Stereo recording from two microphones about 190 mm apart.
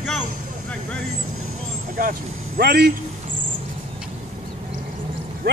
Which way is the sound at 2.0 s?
50° right (ahead or behind).